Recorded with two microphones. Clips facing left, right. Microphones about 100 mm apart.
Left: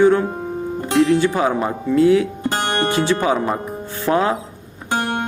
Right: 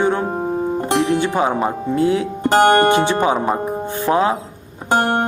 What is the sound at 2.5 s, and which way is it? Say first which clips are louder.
Music: right 10 dB; 50° right (ahead or behind).